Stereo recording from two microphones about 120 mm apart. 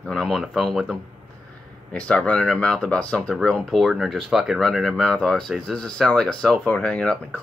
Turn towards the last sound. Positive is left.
turn(degrees=10)  # may be behind; listen again after turning